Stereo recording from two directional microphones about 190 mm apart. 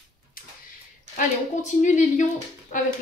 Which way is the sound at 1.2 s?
40° left (ahead or behind).